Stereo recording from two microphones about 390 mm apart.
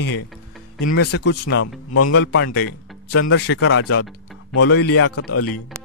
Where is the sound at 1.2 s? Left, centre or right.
Left.